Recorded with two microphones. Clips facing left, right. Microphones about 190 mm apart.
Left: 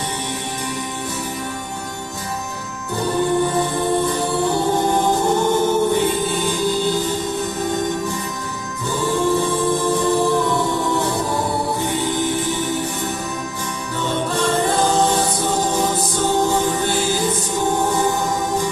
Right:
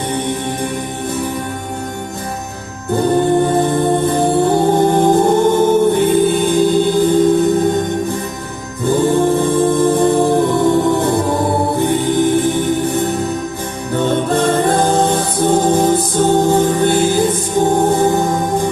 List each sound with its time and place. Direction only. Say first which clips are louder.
2.9 s music: right 6 dB; 55° right (ahead or behind)